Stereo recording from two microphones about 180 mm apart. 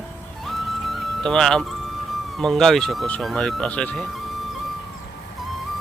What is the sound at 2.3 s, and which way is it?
Speech, centre (ahead or behind).